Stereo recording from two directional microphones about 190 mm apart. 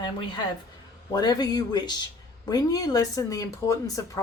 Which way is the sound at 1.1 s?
20° left (ahead or behind).